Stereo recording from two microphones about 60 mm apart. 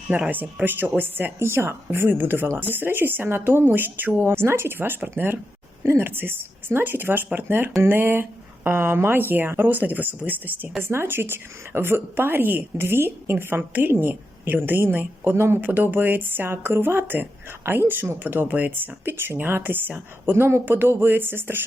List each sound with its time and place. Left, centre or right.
0.1 s speech: right
1.4 s speech: right
10.8 s speech: right